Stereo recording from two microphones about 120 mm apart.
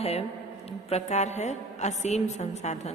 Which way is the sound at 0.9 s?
65° left (ahead or behind).